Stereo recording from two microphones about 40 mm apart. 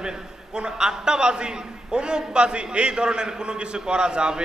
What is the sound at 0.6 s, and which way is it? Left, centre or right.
A man's voice, centre.